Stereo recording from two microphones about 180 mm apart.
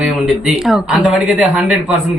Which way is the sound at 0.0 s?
Centre (ahead or behind).